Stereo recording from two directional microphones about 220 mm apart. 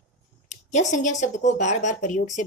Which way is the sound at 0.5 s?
35° left (ahead or behind).